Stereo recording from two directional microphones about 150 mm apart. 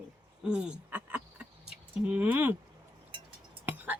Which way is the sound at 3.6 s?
10° right (ahead or behind).